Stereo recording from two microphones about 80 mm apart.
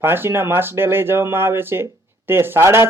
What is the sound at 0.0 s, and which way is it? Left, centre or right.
Speech, right.